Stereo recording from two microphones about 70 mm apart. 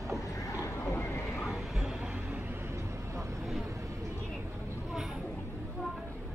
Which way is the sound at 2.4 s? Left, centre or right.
Right.